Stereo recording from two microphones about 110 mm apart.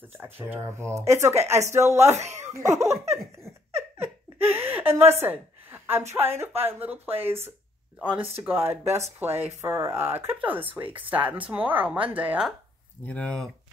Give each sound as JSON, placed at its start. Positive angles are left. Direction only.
{"t": 0.2, "sound": "a child's voice", "side_deg": -20}
{"t": 4.0, "sound": "laughter", "side_deg": -20}
{"t": 5.2, "sound": "a sound", "side_deg": -20}
{"t": 6.1, "sound": "speech", "side_deg": -20}
{"t": 13.0, "sound": "speech", "side_deg": 10}